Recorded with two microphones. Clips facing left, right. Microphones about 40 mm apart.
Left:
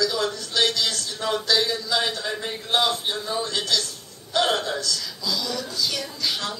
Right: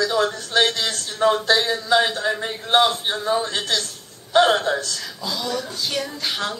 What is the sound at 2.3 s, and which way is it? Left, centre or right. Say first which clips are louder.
Speech: right 3 dB; centre.